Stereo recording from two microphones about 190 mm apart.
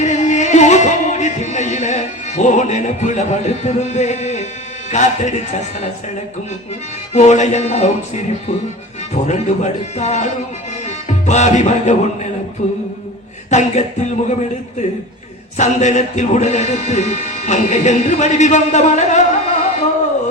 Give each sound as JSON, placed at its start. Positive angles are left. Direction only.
{"t": 0.0, "sound": "music", "side_deg": 40}
{"t": 4.9, "sound": "a man's voice", "side_deg": 35}
{"t": 7.1, "sound": "a man's voice", "side_deg": 40}
{"t": 10.8, "sound": "music", "side_deg": 35}
{"t": 12.6, "sound": "a man's voice", "side_deg": 40}
{"t": 15.5, "sound": "a man's voice", "side_deg": 40}